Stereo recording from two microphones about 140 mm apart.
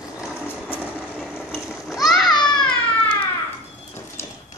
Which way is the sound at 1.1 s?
5° right (ahead or behind).